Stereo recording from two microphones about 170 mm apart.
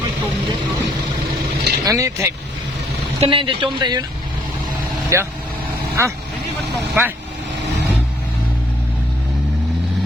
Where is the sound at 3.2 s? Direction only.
30° right (ahead or behind).